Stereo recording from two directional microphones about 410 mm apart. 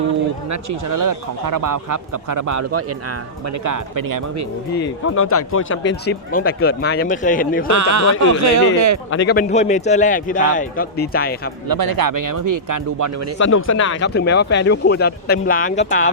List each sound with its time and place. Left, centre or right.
0.5 s speech: right
4.7 s speech: left
7.7 s speech: right
9.0 s speech: left
11.7 s speech: right
13.4 s speech: left